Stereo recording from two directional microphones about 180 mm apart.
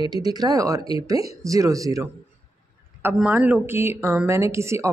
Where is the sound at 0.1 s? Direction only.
20° right (ahead or behind).